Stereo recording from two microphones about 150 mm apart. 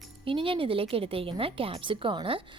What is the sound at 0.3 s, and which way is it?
A woman's voice, 35° right (ahead or behind).